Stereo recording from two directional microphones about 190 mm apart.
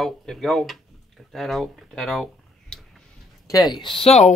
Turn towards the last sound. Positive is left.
turn(degrees=30)  # may be behind; listen again after turning